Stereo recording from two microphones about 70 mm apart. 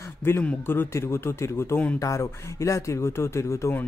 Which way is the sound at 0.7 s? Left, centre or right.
Left.